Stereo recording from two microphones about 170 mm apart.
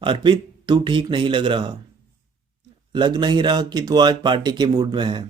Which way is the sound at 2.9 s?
25° right (ahead or behind).